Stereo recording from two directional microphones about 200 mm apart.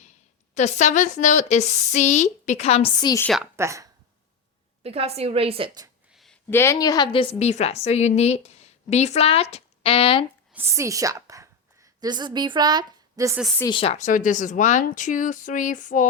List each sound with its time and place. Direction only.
0.5 s speech: 35° left (ahead or behind)
3.6 s speech: 15° right (ahead or behind)
4.8 s a woman's voice: 30° right (ahead or behind)
6.1 s a woman's voice: 5° left (ahead or behind); by 10.2 s 25° left (ahead or behind)
10.5 s a woman's voice: 10° right (ahead or behind)
13.6 s speech: 25° left (ahead or behind); by 16.0 s 40° left (ahead or behind)